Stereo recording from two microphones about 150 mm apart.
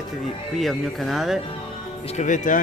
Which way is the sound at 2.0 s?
50° left (ahead or behind).